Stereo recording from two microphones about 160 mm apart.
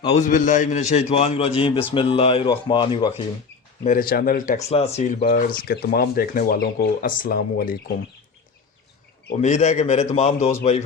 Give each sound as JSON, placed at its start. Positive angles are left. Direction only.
{"t": 0.0, "sound": "a man's voice", "side_deg": 45}
{"t": 3.8, "sound": "speech", "side_deg": 60}
{"t": 4.7, "sound": "a man's voice", "side_deg": 40}
{"t": 5.2, "sound": "speech", "side_deg": 65}
{"t": 9.4, "sound": "a man's voice", "side_deg": 45}